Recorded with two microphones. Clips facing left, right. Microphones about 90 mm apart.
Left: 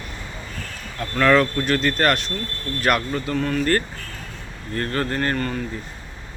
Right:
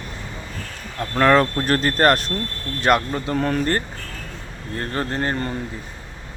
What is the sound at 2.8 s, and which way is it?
Speech, 25° right (ahead or behind).